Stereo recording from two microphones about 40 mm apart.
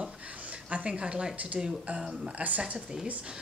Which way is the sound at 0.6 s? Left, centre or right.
Right.